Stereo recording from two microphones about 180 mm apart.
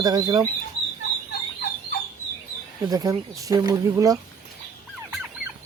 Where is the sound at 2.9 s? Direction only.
20° right (ahead or behind).